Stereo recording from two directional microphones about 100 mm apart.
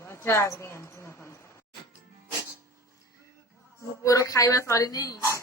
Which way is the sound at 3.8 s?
30° left (ahead or behind).